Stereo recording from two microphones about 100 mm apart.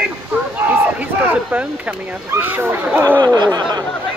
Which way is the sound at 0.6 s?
15° right (ahead or behind).